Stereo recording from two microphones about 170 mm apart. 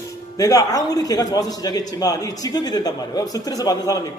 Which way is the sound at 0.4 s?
20° left (ahead or behind).